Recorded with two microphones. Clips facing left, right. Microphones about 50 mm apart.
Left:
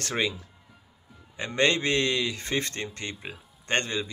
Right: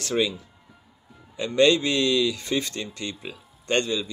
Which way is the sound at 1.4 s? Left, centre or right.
Left.